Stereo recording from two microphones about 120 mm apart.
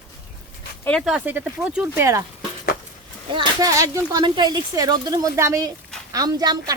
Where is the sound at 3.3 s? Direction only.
40° right (ahead or behind).